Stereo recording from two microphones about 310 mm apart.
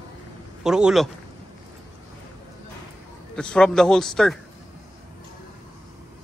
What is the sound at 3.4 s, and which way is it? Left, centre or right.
A man's voice, centre.